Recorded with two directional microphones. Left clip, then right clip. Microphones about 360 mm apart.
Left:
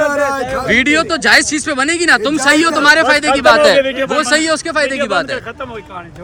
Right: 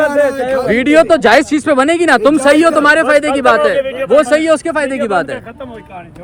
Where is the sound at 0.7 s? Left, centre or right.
Centre.